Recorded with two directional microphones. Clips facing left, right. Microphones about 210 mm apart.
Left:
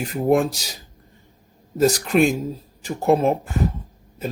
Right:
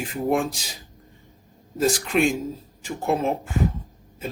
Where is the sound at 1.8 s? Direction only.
40° left (ahead or behind).